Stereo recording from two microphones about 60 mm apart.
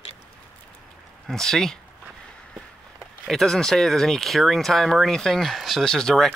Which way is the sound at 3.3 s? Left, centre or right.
Centre.